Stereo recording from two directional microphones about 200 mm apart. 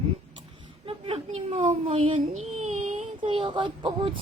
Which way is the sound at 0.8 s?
25° right (ahead or behind).